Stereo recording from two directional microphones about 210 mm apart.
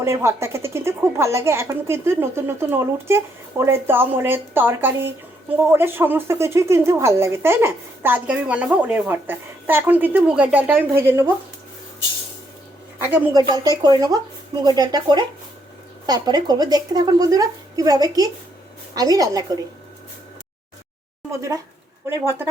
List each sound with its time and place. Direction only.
0.0 s speech: 15° right (ahead or behind)
13.1 s speech: 10° right (ahead or behind)
21.2 s speech: 15° right (ahead or behind)